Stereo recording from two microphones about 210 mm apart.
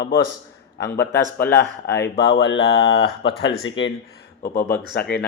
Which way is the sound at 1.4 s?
50° left (ahead or behind).